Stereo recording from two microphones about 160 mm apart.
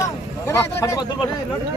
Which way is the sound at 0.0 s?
15° left (ahead or behind).